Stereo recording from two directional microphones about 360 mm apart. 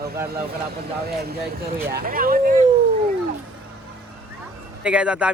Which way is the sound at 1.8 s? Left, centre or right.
Right.